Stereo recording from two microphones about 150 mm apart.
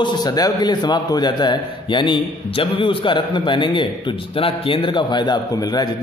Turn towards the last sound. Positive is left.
turn(degrees=25)  # may be behind; listen again after turning